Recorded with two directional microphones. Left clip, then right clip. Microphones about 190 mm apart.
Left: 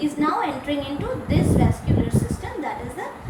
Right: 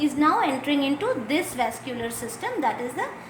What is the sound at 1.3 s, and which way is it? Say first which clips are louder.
Speech: left 2 dB; 55° right (ahead or behind).